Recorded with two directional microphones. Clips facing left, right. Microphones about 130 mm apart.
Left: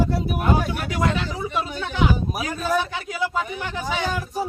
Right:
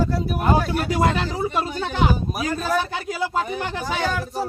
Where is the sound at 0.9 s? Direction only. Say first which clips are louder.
Right 3 dB; 35° right (ahead or behind).